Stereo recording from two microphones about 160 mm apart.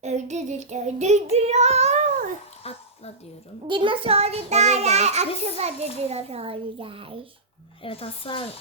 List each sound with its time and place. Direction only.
0.0 s child singing: 45° right (ahead or behind)
2.6 s speech: 40° left (ahead or behind)
3.7 s a child's voice: 30° right (ahead or behind)
7.8 s speech: 35° left (ahead or behind)